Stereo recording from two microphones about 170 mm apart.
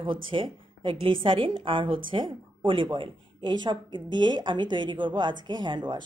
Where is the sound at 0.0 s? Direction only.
30° right (ahead or behind).